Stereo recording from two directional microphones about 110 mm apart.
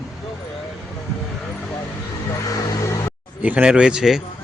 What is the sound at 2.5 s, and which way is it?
Music, 30° left (ahead or behind).